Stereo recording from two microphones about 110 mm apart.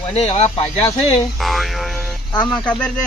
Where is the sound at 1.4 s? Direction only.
Centre (ahead or behind).